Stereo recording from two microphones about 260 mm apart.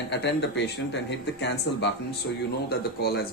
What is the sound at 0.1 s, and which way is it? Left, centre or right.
Speech, left.